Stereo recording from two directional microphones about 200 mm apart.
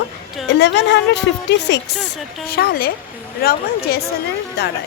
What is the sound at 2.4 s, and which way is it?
A woman's voice, 50° left (ahead or behind).